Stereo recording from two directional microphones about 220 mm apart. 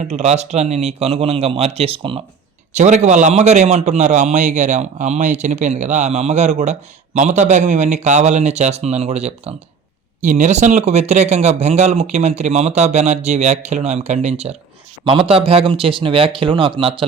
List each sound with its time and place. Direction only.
0.1 s a man's voice: 30° right (ahead or behind)